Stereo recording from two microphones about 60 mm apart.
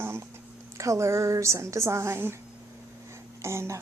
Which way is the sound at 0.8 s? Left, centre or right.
Right.